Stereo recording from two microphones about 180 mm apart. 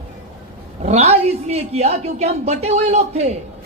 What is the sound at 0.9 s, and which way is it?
A man's voice, 35° right (ahead or behind).